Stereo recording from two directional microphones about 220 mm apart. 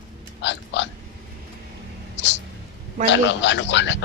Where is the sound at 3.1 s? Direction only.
55° left (ahead or behind).